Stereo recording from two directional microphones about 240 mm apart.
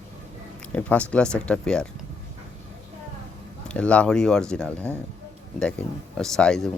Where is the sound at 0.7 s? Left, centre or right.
Centre.